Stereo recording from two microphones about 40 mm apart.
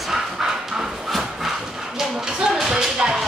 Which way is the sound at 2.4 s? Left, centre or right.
Centre.